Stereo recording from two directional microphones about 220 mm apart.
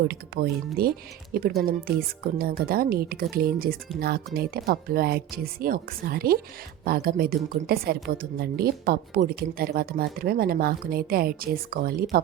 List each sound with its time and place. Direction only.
0.1 s a woman's voice: 45° right (ahead or behind)